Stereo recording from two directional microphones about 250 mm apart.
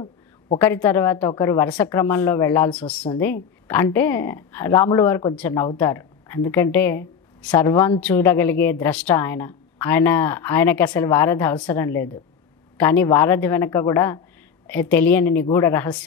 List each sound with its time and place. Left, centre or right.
0.6 s speech: centre